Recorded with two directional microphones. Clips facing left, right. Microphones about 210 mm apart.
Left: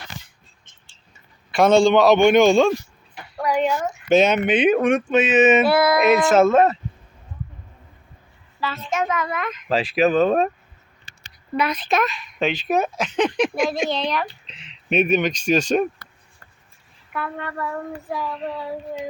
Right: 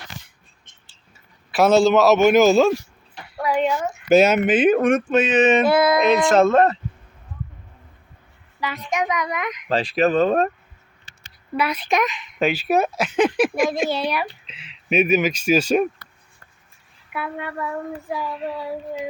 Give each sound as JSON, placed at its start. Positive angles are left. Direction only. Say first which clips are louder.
{"t": 0.9, "sound": "a man's voice", "louder": "left 1 dB", "side_deg": -5}
{"t": 5.6, "sound": "music", "louder": "right 1 dB", "side_deg": -20}
{"t": 6.0, "sound": "speech", "louder": "even", "side_deg": 5}
{"t": 8.6, "sound": "speech", "louder": "even", "side_deg": -15}
{"t": 9.6, "sound": "speech", "louder": "left 1 dB", "side_deg": 0}
{"t": 11.5, "sound": "speech", "louder": "even", "side_deg": -10}
{"t": 12.4, "sound": "speech", "louder": "right 2 dB", "side_deg": -5}
{"t": 17.1, "sound": "speech", "louder": "even", "side_deg": -10}